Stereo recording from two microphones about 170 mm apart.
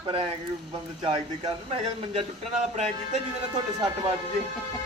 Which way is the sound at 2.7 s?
40° right (ahead or behind).